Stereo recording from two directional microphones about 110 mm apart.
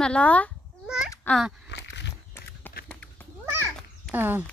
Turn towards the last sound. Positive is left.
turn(degrees=-20)  # may be behind; listen again after turning